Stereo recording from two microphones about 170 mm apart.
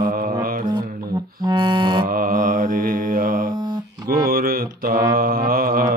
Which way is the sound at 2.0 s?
55° right (ahead or behind).